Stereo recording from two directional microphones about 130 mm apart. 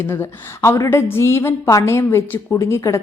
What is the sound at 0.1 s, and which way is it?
A woman's voice, 20° left (ahead or behind).